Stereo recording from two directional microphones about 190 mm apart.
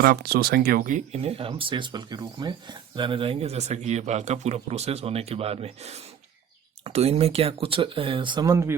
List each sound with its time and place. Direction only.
0.0 s speech: 60° right (ahead or behind); by 8.7 s 15° right (ahead or behind)